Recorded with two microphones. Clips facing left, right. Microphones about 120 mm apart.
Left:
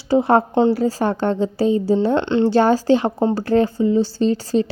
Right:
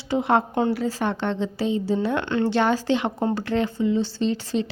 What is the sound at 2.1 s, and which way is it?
Speech, 25° left (ahead or behind).